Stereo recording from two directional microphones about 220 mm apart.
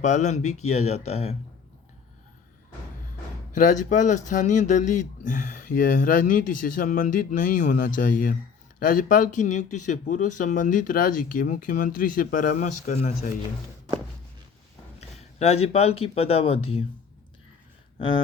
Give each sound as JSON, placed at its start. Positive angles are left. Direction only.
{"t": 0.0, "sound": "speech", "side_deg": 30}
{"t": 3.5, "sound": "speech", "side_deg": 35}
{"t": 15.4, "sound": "speech", "side_deg": 30}